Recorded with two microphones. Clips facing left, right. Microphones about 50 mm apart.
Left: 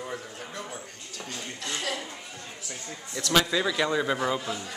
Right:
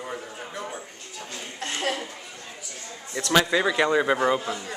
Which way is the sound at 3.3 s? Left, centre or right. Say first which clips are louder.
Right 3 dB; right.